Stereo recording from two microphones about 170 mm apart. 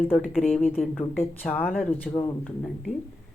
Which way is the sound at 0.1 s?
5° right (ahead or behind).